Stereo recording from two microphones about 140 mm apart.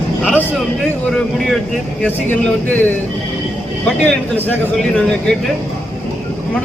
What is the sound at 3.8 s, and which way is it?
Speech, 10° left (ahead or behind).